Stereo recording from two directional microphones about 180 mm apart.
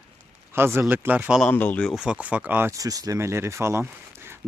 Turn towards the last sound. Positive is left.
turn(degrees=-15)  # may be behind; listen again after turning